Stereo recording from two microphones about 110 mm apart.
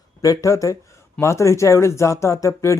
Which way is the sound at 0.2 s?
30° left (ahead or behind).